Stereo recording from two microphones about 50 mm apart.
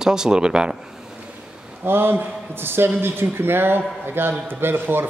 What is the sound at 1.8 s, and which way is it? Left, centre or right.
A man's voice, right.